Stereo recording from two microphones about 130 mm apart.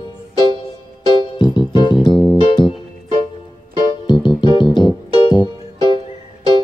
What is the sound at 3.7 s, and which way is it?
Music, 35° left (ahead or behind).